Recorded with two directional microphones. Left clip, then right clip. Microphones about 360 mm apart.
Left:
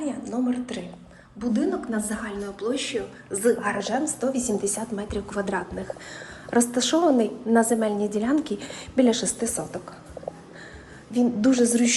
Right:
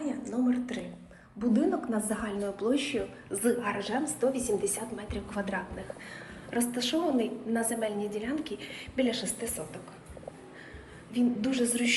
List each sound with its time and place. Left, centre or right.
0.1 s a woman's voice: centre
11.1 s a woman's voice: centre